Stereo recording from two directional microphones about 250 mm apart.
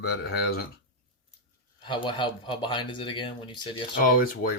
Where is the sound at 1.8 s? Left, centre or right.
Centre.